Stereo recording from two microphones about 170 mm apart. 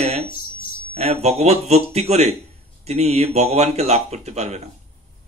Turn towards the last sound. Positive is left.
turn(degrees=-40)  # may be behind; listen again after turning